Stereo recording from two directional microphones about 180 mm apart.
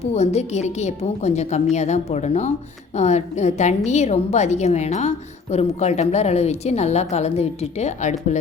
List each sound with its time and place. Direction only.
0.1 s a woman's voice: 35° left (ahead or behind)